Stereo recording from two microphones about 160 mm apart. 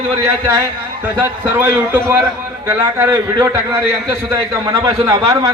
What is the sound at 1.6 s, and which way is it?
A man's voice, 15° right (ahead or behind).